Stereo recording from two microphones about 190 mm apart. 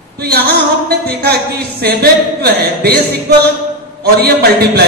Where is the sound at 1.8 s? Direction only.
55° right (ahead or behind).